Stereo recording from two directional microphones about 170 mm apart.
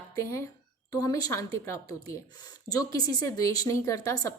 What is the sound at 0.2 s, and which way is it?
A woman's voice, 15° left (ahead or behind).